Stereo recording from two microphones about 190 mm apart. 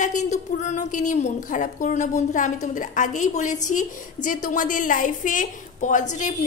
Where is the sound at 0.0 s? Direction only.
40° left (ahead or behind).